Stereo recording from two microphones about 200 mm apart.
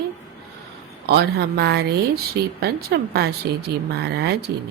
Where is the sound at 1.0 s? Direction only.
55° right (ahead or behind).